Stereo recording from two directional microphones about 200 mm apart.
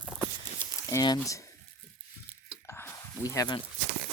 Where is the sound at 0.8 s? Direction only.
20° left (ahead or behind).